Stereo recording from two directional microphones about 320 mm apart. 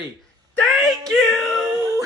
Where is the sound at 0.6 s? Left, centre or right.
Centre.